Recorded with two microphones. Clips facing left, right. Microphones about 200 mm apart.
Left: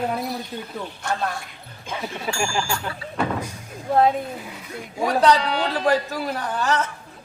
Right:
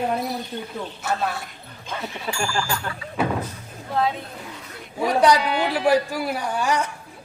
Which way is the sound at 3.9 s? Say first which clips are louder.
Left 5 dB; 45° left (ahead or behind).